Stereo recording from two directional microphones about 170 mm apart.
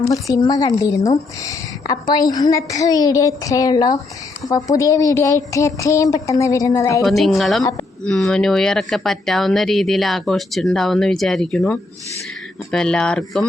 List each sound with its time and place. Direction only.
0.1 s a woman's voice: 20° left (ahead or behind)
7.0 s speech: centre (ahead or behind)